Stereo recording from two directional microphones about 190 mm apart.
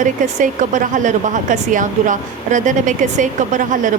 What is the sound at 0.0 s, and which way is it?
A woman's voice, 40° right (ahead or behind).